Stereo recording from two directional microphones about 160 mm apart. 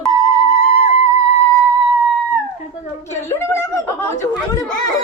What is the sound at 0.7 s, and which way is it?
Music, 40° left (ahead or behind).